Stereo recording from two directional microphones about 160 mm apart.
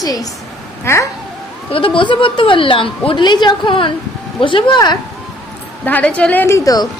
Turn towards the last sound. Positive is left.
turn(degrees=25)  # may be behind; listen again after turning